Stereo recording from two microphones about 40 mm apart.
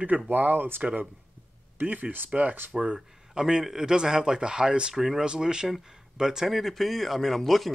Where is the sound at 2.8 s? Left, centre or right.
Centre.